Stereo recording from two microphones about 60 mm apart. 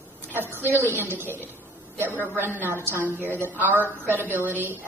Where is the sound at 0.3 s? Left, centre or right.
Right.